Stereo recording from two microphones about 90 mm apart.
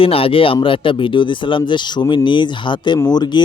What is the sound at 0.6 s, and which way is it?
Speech, 70° left (ahead or behind).